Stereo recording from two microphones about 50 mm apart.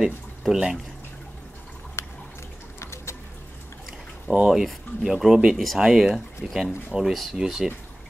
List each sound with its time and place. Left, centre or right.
0.0 s speech: centre
2.0 s drip: left
2.8 s a sound: left
4.3 s speech: left
5.0 s speech: centre
6.9 s speech: centre
7.4 s speech: centre